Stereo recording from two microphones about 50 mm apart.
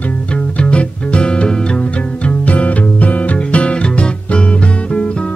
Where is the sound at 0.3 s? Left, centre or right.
Left.